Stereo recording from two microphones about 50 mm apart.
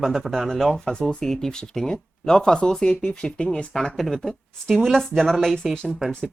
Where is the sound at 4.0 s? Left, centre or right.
Centre.